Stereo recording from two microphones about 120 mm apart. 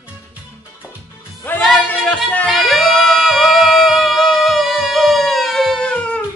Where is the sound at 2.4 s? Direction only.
Centre (ahead or behind).